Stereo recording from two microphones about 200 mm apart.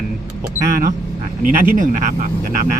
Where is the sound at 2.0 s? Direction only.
40° right (ahead or behind).